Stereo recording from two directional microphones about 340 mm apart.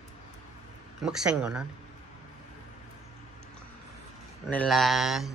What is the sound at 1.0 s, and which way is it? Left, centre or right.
Speech, centre.